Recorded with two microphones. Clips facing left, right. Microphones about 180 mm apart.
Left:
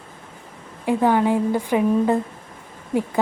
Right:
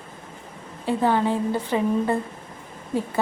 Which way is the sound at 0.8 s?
15° left (ahead or behind).